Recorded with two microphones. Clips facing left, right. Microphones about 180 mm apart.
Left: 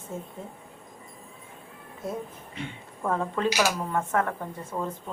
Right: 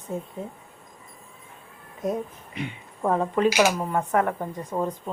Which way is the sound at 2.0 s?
20° right (ahead or behind).